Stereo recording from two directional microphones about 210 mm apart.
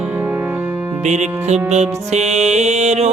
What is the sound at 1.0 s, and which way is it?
Music, 35° right (ahead or behind).